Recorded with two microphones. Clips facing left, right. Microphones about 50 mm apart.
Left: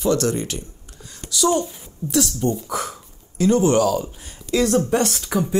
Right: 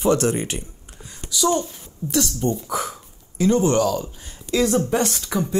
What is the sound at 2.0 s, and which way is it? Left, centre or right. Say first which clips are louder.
Speech: left 1 dB; left.